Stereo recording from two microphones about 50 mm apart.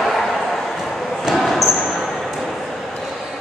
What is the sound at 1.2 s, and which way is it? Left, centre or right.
Basketball bounce, centre.